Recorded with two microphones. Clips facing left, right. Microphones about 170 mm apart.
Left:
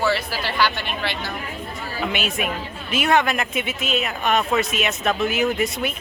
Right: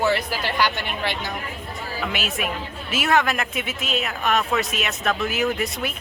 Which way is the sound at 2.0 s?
Centre (ahead or behind).